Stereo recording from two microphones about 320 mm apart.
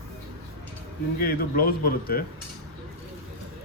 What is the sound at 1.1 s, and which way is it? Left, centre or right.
Speech, left.